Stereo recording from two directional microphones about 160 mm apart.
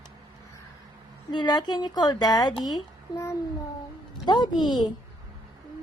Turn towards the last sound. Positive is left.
turn(degrees=25)  # may be behind; listen again after turning